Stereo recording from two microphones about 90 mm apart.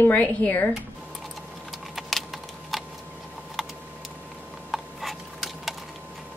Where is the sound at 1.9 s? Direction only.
Centre (ahead or behind).